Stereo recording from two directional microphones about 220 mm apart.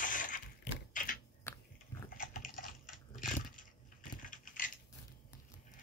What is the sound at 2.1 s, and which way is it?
Typing, 40° left (ahead or behind).